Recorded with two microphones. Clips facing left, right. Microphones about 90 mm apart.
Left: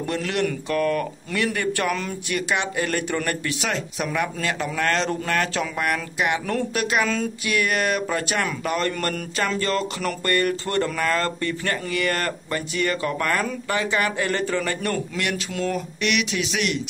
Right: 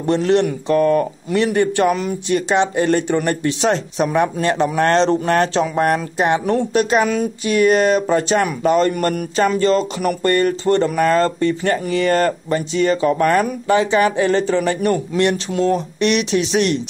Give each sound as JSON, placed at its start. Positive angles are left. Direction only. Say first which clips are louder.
{"t": 0.0, "sound": "speech", "louder": "right 9 dB", "side_deg": -30}
{"t": 6.5, "sound": "speech", "louder": "right 7 dB", "side_deg": -25}